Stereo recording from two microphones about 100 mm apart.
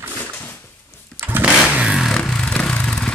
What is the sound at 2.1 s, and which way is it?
Vehicle, 5° left (ahead or behind).